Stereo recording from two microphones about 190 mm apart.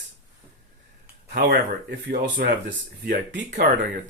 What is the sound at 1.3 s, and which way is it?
Speech, 55° right (ahead or behind).